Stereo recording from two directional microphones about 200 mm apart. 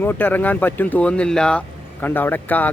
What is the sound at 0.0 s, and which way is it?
Speech, 10° left (ahead or behind).